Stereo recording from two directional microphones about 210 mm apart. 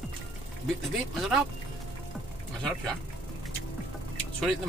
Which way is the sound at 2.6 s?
5° left (ahead or behind).